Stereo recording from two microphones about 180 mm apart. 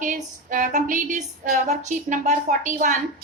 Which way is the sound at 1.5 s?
40° right (ahead or behind).